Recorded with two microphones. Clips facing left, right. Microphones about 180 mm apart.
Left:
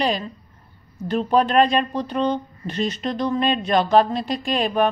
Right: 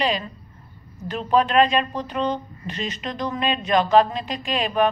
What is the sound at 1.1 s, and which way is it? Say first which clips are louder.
Speech: left 1 dB; 40° left (ahead or behind).